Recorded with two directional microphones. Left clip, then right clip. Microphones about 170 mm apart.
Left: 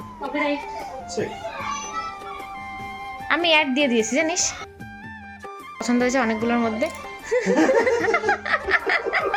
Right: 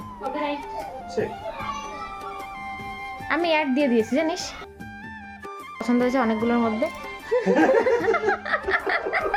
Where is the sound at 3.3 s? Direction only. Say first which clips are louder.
Left 3 dB; 5° right (ahead or behind).